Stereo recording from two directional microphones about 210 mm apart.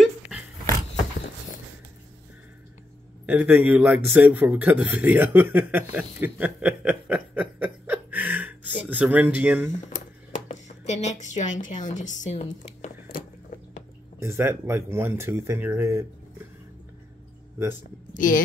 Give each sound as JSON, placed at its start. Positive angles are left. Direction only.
{"t": 0.0, "sound": "dog", "side_deg": -5}
{"t": 3.3, "sound": "a man's voice", "side_deg": -5}
{"t": 10.5, "sound": "speech", "side_deg": 30}
{"t": 14.2, "sound": "speech", "side_deg": -10}
{"t": 18.1, "sound": "a woman's voice", "side_deg": 40}